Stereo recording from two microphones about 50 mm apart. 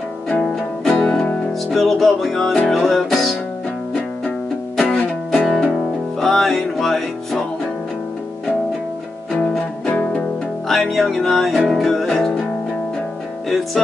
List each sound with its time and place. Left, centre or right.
0.4 s music: centre
1.0 s music: centre
1.7 s music: centre
4.7 s music: centre
9.3 s music: centre
9.8 s music: left
10.7 s music: centre